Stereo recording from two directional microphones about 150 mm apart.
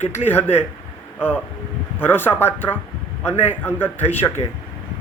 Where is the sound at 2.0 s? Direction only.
15° left (ahead or behind).